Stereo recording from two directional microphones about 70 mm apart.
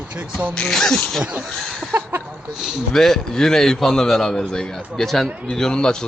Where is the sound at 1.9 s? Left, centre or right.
Right.